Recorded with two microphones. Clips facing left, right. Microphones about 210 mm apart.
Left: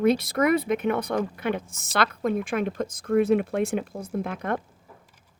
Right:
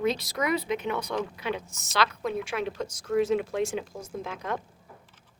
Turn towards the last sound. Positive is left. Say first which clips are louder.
# left 5 dB
turn(degrees=55)  # may be behind; listen again after turning